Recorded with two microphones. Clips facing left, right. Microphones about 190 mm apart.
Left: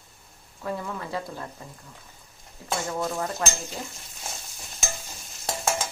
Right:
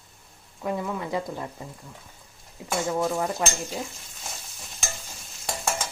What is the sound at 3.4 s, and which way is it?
Speech, 15° right (ahead or behind).